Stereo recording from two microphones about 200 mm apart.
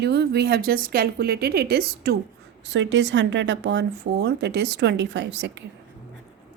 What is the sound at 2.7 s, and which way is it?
A woman's voice, 65° right (ahead or behind).